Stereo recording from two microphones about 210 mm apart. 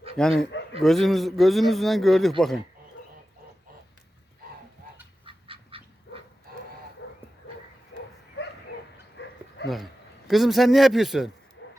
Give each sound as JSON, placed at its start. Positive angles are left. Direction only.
{"t": 0.2, "sound": "a man's voice", "side_deg": 0}
{"t": 5.2, "sound": "duck", "side_deg": -25}
{"t": 7.0, "sound": "dog", "side_deg": 55}
{"t": 8.4, "sound": "dog", "side_deg": 55}
{"t": 9.2, "sound": "bow-wow", "side_deg": 55}
{"t": 9.6, "sound": "a man's voice", "side_deg": 0}